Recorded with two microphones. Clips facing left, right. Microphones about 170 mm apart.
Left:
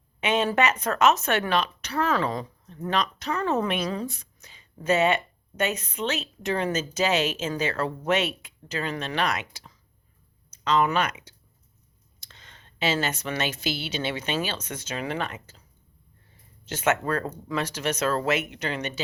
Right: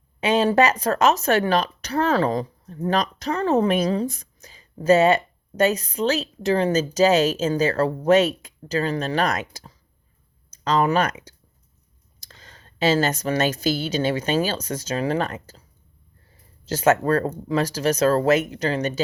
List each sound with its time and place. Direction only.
0.2 s speech: 35° right (ahead or behind)
16.6 s speech: 35° right (ahead or behind)